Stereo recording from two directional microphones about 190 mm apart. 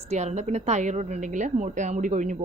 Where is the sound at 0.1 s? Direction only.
35° right (ahead or behind).